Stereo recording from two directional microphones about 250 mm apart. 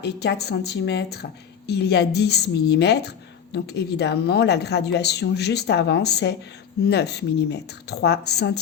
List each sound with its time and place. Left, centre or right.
0.0 s speech: left